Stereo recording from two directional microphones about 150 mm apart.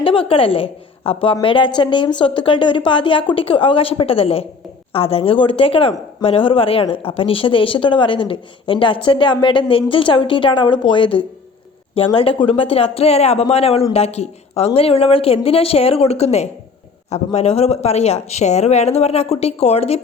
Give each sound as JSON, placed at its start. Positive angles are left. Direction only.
{"t": 0.0, "sound": "a woman's voice", "side_deg": 35}